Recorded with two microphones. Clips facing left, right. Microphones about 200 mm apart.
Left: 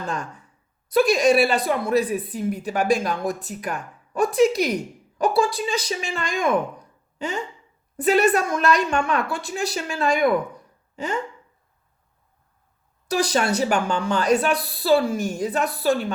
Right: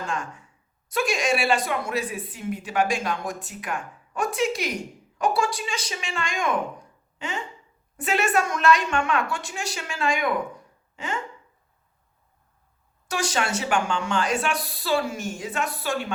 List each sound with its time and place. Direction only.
0.0 s speech: 40° left (ahead or behind)
13.1 s speech: 35° left (ahead or behind)